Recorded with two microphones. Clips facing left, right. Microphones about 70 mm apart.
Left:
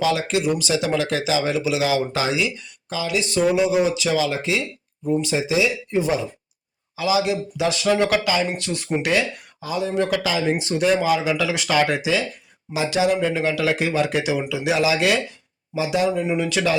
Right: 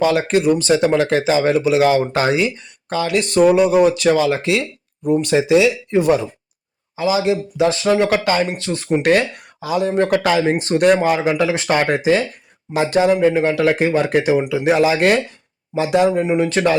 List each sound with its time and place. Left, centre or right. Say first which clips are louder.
0.0 s speech: right 5 dB; right
6.9 s speech: right 3 dB; right
8.0 s speech: right 3 dB; right
8.5 s speech: right 4 dB; right
9.0 s speech: right 6 dB; right
9.6 s speech: right 6 dB; right
9.9 s speech: right 6 dB; right
10.4 s speech: right 4 dB; right
10.8 s speech: right 5 dB; right
16.2 s speech: right 5 dB; right